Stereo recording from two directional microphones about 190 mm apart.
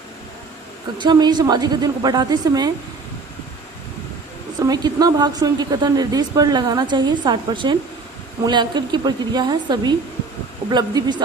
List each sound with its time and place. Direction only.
0.9 s speech: 25° right (ahead or behind)
4.6 s speech: 20° right (ahead or behind)